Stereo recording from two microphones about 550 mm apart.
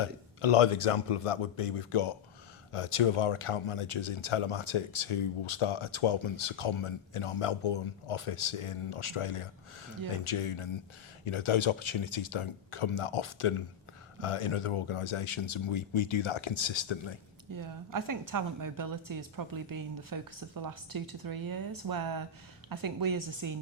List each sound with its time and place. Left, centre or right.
0.0 s speech: left
17.5 s a woman's voice: right